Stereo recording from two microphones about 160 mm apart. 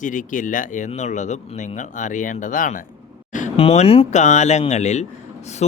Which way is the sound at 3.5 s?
40° left (ahead or behind).